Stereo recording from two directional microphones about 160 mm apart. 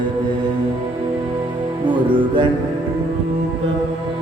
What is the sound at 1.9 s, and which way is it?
Music, 30° right (ahead or behind).